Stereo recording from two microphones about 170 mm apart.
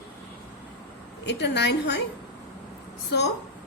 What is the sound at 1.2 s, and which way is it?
Speech, 90° left.